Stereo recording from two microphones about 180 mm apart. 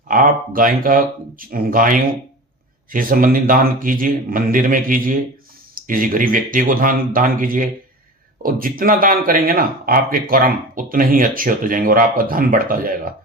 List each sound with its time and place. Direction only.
0.1 s speech: 50° right (ahead or behind)